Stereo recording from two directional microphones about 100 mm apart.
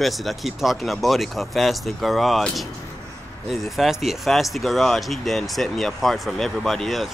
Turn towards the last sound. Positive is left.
turn(degrees=0)  # may be behind; listen again after turning